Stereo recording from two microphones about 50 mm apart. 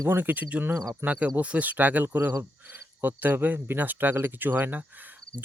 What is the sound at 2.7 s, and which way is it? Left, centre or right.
Cricket, right.